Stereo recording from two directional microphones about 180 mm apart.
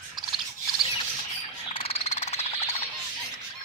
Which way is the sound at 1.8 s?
35° left (ahead or behind).